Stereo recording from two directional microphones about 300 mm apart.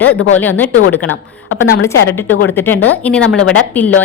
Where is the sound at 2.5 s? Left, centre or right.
Centre.